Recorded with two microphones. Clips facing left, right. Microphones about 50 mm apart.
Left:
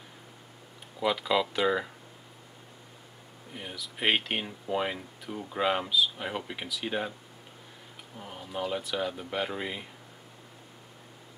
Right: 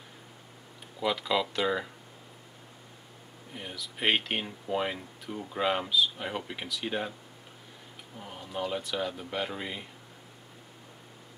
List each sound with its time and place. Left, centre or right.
0.9 s speech: centre
3.5 s speech: centre
8.2 s speech: centre